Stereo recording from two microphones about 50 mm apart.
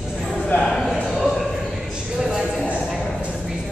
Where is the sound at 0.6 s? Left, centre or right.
Centre.